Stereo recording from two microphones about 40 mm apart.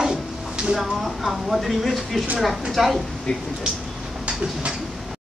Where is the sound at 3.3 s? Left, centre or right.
Left.